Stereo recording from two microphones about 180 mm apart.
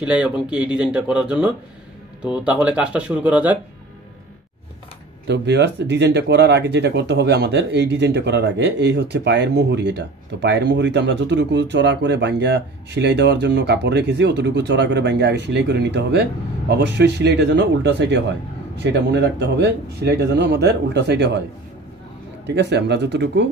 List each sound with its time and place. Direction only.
0.0 s speech: 5° right (ahead or behind)
5.2 s speech: 70° right (ahead or behind)
22.5 s speech: 70° right (ahead or behind)